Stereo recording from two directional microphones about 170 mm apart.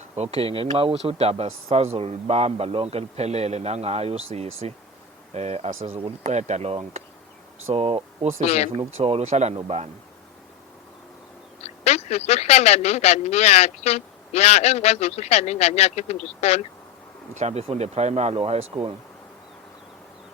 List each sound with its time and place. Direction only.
0.2 s a man's voice: 35° right (ahead or behind)
8.4 s speech: 40° left (ahead or behind)
9.0 s a man's voice: 40° right (ahead or behind)
11.6 s speech: 40° left (ahead or behind)
17.3 s a man's voice: 40° right (ahead or behind)